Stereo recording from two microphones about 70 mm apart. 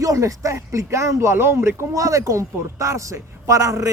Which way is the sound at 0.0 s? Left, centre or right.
Right.